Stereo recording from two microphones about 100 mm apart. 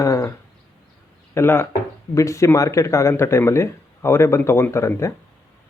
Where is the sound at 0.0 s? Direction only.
30° left (ahead or behind).